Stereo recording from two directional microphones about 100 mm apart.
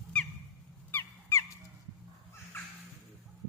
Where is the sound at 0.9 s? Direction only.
20° left (ahead or behind).